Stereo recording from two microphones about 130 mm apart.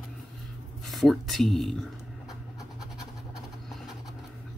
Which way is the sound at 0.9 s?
Centre (ahead or behind).